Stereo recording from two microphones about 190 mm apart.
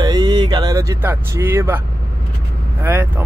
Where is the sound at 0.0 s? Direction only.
20° right (ahead or behind).